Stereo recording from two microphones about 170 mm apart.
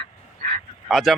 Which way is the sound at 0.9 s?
Centre (ahead or behind).